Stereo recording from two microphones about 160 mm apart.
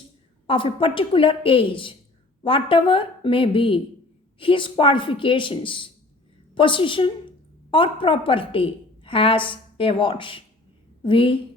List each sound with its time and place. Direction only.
0.4 s a woman's voice: 35° left (ahead or behind)